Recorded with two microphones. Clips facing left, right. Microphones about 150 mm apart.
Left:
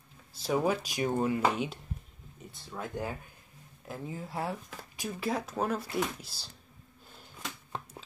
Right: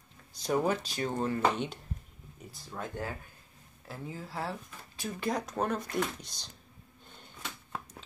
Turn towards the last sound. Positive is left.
turn(degrees=5)  # may be behind; listen again after turning